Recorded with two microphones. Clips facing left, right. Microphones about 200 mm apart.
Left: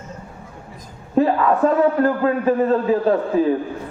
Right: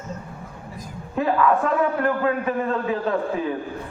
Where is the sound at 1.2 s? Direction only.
35° left (ahead or behind).